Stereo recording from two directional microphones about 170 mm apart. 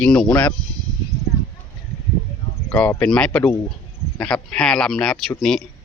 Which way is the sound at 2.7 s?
10° left (ahead or behind).